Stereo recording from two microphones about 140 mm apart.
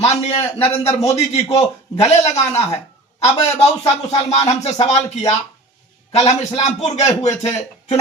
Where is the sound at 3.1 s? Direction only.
50° left (ahead or behind).